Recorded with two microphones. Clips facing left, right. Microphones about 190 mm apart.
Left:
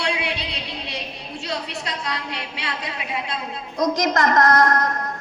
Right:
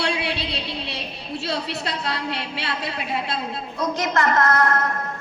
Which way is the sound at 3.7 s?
40° left (ahead or behind).